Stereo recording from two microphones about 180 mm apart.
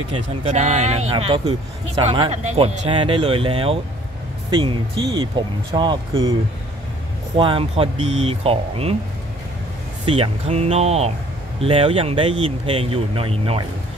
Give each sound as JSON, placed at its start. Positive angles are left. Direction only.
{"t": 0.1, "sound": "speech", "side_deg": -35}
{"t": 7.3, "sound": "speech", "side_deg": -30}
{"t": 10.0, "sound": "speech", "side_deg": -30}